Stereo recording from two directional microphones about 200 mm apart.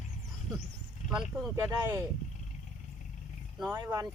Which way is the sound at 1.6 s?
15° right (ahead or behind).